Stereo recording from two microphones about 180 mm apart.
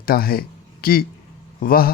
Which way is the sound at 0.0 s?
55° left (ahead or behind).